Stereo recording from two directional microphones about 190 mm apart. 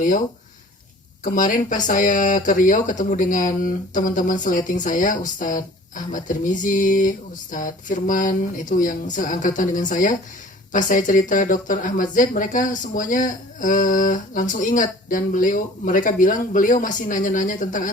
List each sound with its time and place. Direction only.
1.2 s speech: 40° left (ahead or behind)